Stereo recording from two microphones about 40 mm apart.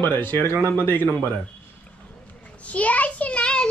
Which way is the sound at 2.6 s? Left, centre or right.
Left.